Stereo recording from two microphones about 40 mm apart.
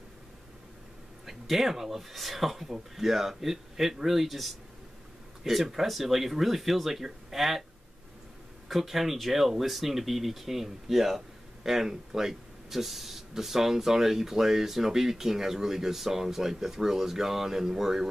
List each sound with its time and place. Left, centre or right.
1.2 s speech: centre
8.6 s speech: centre